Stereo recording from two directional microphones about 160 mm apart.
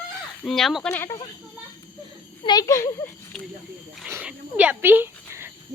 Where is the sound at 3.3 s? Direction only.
5° left (ahead or behind).